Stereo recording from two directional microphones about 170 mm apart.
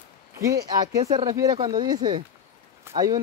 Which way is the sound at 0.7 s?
25° right (ahead or behind).